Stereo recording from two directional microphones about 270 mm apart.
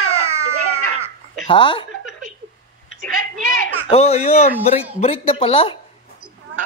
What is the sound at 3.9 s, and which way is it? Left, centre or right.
Speech, left.